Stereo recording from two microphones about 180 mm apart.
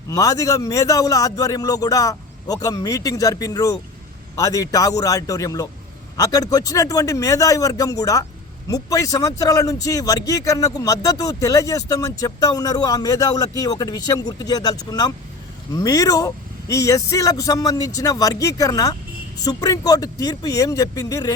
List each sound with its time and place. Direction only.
0.1 s speech: 20° left (ahead or behind)